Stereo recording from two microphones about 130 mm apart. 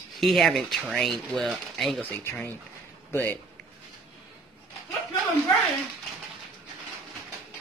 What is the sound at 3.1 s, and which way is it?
Speech, 15° left (ahead or behind).